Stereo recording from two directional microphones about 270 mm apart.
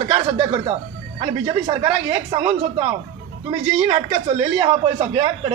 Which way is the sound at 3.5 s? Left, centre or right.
Right.